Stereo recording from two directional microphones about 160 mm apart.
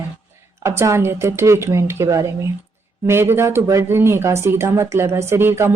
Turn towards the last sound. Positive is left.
turn(degrees=-15)  # may be behind; listen again after turning